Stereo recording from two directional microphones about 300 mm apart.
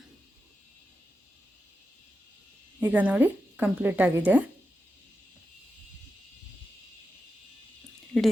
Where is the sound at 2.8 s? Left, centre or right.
Centre.